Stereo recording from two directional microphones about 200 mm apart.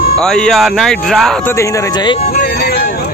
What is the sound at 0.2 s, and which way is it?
Speech, 5° left (ahead or behind).